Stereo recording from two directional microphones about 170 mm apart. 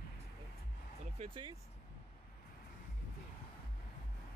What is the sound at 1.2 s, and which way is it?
Speech, 30° right (ahead or behind).